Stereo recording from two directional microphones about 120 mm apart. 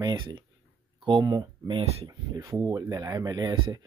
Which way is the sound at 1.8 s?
60° right (ahead or behind).